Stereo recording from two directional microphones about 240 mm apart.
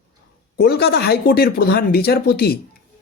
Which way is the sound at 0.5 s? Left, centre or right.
Left.